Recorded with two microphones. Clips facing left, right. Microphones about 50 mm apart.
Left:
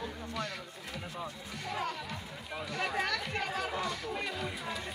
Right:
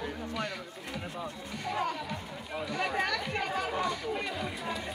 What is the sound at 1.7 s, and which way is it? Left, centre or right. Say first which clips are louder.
Music: right 4 dB; centre.